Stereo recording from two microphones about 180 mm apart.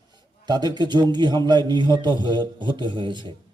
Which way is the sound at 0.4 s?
25° right (ahead or behind).